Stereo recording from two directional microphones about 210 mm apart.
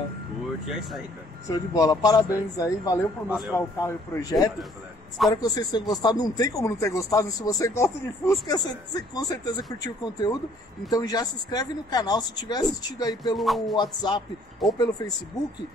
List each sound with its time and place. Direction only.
0.7 s music: centre (ahead or behind)
1.7 s speech: 15° left (ahead or behind)
3.3 s music: centre (ahead or behind)
3.5 s speech: 15° left (ahead or behind)
13.4 s music: centre (ahead or behind)
13.7 s speech: 20° left (ahead or behind)
14.6 s music: centre (ahead or behind)